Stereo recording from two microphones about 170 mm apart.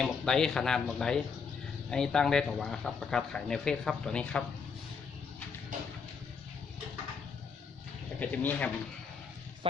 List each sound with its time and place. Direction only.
0.0 s speech: 5° left (ahead or behind)
5.7 s a sound: 50° right (ahead or behind)
8.2 s speech: 10° left (ahead or behind)